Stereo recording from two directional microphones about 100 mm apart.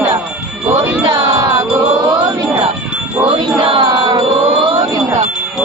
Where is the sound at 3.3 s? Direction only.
50° right (ahead or behind).